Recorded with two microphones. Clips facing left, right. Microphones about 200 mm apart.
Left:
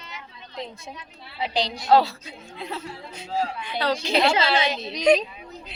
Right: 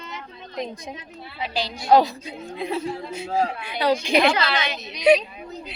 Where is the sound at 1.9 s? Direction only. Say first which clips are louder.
Right 2 dB; 15° right (ahead or behind).